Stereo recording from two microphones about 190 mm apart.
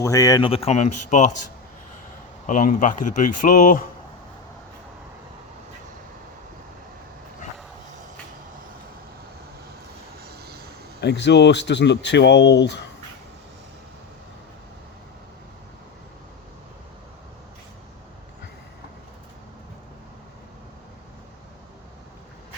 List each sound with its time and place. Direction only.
0.0 s speech: 20° left (ahead or behind); by 1.3 s 40° left (ahead or behind)
2.5 s speech: 45° left (ahead or behind)
10.2 s vehicle: 55° right (ahead or behind)
11.0 s speech: 65° left (ahead or behind)